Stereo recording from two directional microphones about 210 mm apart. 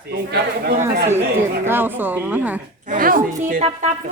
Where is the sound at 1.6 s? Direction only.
10° right (ahead or behind).